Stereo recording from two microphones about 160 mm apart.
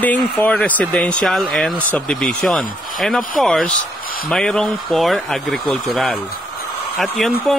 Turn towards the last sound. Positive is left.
turn(degrees=0)  # may be behind; listen again after turning